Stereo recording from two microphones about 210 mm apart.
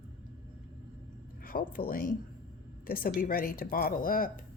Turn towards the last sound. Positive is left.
turn(degrees=40)  # may be behind; listen again after turning